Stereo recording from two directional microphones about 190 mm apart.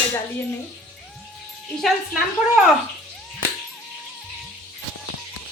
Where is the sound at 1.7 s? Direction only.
Centre (ahead or behind).